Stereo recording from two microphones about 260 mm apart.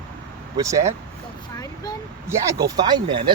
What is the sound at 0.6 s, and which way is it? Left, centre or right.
Speech, centre.